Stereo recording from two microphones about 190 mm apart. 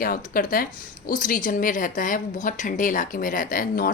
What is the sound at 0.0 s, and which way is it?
A woman's voice, 50° left (ahead or behind).